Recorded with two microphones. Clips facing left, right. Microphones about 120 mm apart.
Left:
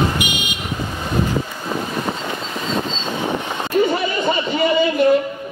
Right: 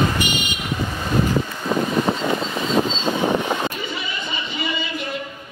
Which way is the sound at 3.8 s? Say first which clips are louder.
Left 11 dB; 50° left (ahead or behind).